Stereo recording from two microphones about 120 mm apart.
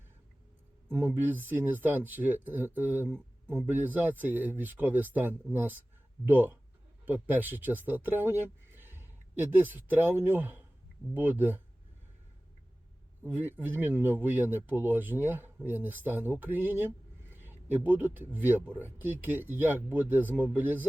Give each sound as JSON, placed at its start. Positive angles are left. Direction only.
{"t": 0.9, "sound": "speech", "side_deg": -15}
{"t": 13.2, "sound": "speech", "side_deg": -15}